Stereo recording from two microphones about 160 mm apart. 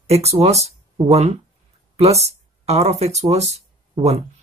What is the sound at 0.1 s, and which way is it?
Speech, 40° right (ahead or behind).